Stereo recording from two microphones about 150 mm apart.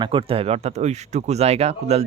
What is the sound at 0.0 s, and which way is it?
Speech, 35° right (ahead or behind).